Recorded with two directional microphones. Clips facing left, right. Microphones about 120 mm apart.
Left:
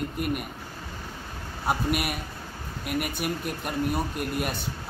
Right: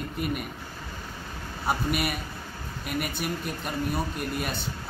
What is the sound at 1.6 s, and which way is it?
A man's voice, 5° left (ahead or behind).